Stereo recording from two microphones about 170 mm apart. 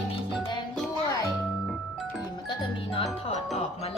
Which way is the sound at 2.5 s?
35° left (ahead or behind).